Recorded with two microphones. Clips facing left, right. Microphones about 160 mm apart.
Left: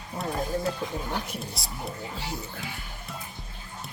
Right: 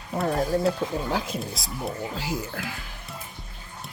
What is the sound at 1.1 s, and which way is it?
Speech, 90° right.